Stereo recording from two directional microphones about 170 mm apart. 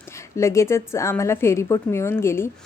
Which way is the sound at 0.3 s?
15° left (ahead or behind).